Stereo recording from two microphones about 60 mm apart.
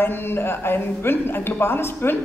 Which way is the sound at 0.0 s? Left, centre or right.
Left.